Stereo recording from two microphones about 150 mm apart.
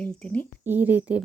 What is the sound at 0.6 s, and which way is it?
Speech, 10° right (ahead or behind).